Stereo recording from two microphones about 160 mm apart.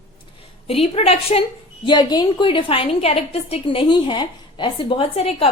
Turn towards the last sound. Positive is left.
turn(degrees=40)  # may be behind; listen again after turning